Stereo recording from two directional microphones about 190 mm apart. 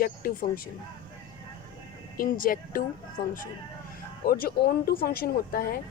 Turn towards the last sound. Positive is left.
turn(degrees=50)  # may be behind; listen again after turning